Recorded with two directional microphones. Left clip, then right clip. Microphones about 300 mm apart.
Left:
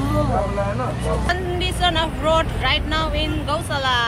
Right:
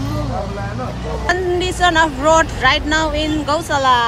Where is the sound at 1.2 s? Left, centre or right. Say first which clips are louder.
Right 10 dB; right.